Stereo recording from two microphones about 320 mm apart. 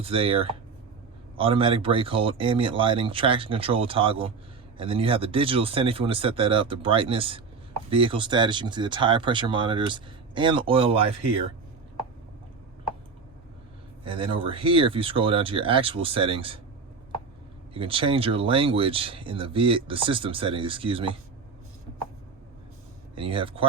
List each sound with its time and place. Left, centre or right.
0.0 s speech: centre
14.0 s speech: centre
17.7 s speech: centre
23.1 s speech: centre